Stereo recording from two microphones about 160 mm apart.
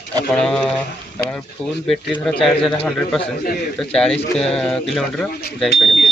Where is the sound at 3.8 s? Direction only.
5° left (ahead or behind).